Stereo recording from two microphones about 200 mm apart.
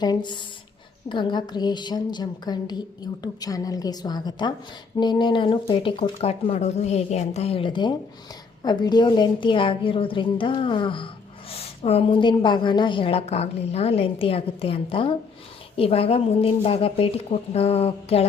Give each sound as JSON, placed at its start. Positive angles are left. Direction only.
{"t": 0.0, "sound": "a woman's voice", "side_deg": 20}